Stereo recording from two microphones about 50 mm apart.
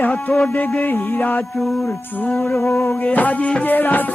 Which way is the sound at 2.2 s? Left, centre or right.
Left.